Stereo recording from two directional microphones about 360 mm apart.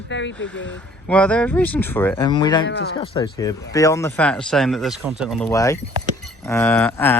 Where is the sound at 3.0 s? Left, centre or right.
Centre.